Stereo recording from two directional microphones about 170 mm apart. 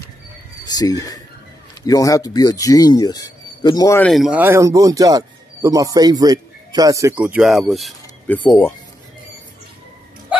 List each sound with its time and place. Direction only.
0.7 s speech: 20° left (ahead or behind)
4.0 s speech: centre (ahead or behind)
4.4 s speech: 15° right (ahead or behind)
7.2 s speech: 5° right (ahead or behind)